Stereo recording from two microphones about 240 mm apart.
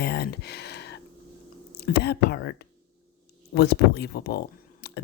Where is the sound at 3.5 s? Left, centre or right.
Left.